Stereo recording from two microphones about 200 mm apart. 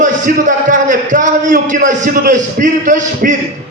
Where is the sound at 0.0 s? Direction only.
40° right (ahead or behind).